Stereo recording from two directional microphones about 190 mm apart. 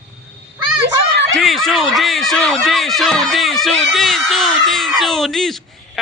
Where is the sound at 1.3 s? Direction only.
Centre (ahead or behind).